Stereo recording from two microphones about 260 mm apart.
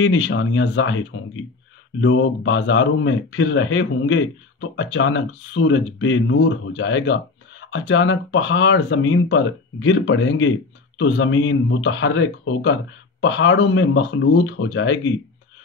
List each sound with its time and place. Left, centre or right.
0.0 s speech: left